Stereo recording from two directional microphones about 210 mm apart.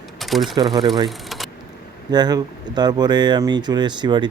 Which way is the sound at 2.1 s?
20° right (ahead or behind).